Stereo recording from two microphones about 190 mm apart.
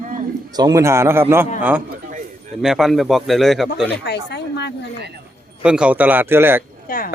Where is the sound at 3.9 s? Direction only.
60° left (ahead or behind).